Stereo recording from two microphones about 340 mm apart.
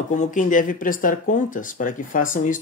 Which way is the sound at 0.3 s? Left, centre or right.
Left.